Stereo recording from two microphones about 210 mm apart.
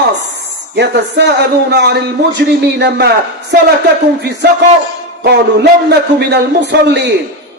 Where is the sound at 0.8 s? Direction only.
55° right (ahead or behind).